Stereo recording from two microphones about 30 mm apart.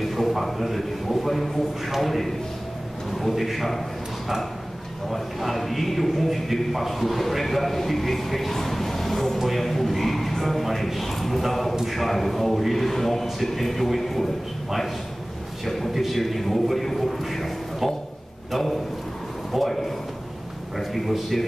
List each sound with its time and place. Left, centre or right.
0.0 s a sound: centre
0.5 s a man's voice: centre
5.1 s a man's voice: centre
15.6 s a man's voice: centre
15.9 s a man's voice: centre
16.2 s a man's voice: centre
18.5 s a man's voice: centre
19.5 s a man's voice: centre
20.7 s a man's voice: centre